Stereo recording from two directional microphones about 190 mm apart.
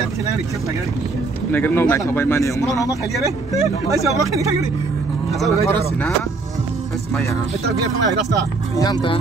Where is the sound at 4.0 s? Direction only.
15° right (ahead or behind).